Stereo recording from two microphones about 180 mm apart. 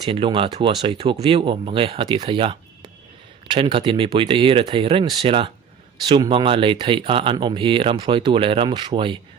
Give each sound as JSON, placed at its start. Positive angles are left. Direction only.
{"t": 0.0, "sound": "speech", "side_deg": -25}